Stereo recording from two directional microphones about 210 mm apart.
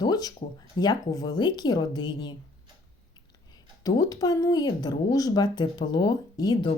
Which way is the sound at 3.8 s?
15° left (ahead or behind).